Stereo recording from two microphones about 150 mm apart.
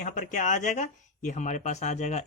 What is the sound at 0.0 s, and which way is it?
Speech, 55° left (ahead or behind).